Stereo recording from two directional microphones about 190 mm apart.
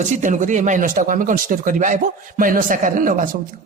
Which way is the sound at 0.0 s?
40° right (ahead or behind).